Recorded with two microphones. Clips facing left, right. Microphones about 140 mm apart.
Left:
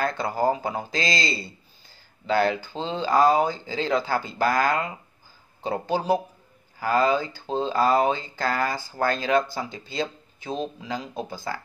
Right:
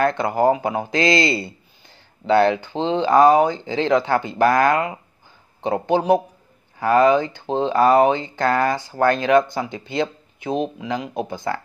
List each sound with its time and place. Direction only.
0.0 s speech: 20° right (ahead or behind)
2.3 s speech: 25° right (ahead or behind)